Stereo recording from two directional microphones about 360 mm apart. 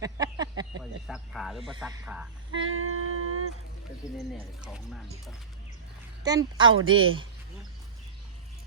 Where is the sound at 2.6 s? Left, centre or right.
Right.